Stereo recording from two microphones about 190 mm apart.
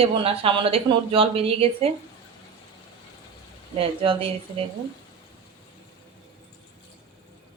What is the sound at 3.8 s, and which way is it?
Speech, 30° right (ahead or behind).